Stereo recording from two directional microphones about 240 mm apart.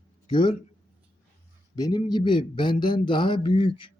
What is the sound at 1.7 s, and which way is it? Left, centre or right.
A man's voice, centre.